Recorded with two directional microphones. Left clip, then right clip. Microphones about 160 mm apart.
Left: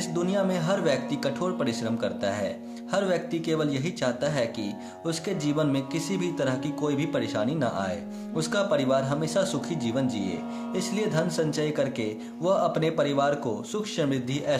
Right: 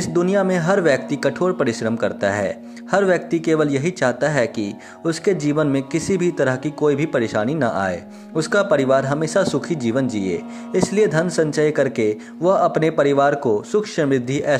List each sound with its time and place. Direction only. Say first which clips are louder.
0.0 s speech: right 9 dB; 45° right (ahead or behind)